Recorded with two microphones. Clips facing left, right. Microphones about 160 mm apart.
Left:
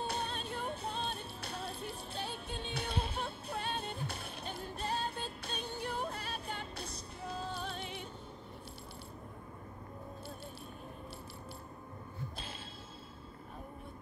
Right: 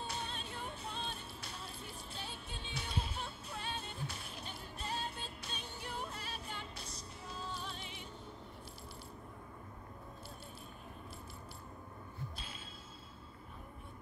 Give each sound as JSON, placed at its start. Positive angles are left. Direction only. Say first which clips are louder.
{"t": 0.0, "sound": "music", "louder": "left 5 dB", "side_deg": 55}